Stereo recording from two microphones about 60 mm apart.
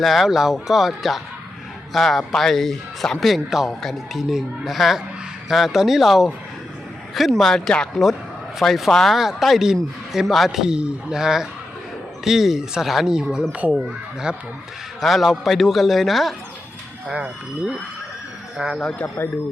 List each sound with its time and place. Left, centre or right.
0.0 s a man's voice: centre
15.0 s a man's voice: centre
17.1 s a man's voice: centre